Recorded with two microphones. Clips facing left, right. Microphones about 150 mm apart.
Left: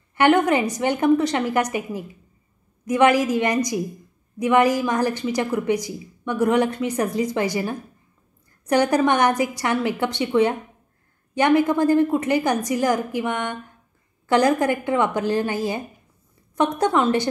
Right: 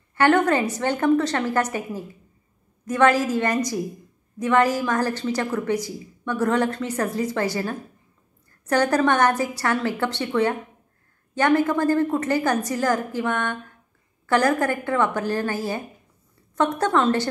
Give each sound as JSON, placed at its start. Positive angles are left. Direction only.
{"t": 0.1, "sound": "a woman's voice", "side_deg": 15}